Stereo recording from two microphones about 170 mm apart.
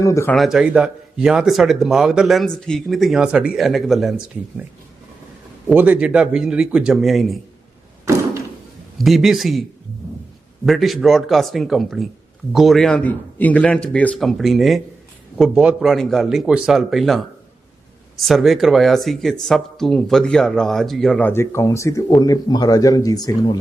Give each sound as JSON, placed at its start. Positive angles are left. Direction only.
{"t": 0.0, "sound": "speech", "side_deg": 15}
{"t": 0.3, "sound": "speech", "side_deg": 0}
{"t": 5.6, "sound": "speech", "side_deg": -10}
{"t": 8.0, "sound": "door", "side_deg": -15}
{"t": 9.0, "sound": "speech", "side_deg": 0}
{"t": 10.7, "sound": "speech", "side_deg": 0}